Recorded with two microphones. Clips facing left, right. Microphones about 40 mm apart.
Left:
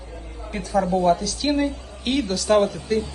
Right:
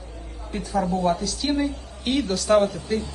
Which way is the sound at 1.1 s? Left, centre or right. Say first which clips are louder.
Left 2 dB; centre.